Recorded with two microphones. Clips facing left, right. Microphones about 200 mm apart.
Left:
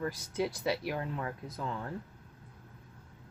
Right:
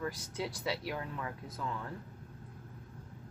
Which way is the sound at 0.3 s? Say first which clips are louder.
Left 7 dB; 25° left (ahead or behind).